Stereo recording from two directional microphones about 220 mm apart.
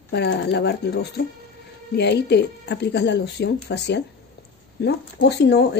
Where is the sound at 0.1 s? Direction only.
50° left (ahead or behind).